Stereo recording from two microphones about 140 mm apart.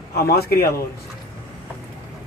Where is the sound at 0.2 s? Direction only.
90° left.